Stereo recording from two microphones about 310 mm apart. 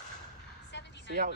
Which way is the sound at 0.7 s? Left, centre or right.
Left.